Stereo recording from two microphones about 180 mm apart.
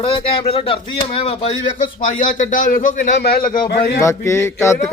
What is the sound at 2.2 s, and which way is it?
Speech, 45° left (ahead or behind).